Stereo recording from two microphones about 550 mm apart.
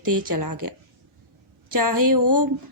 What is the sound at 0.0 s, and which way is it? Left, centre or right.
Speech, right.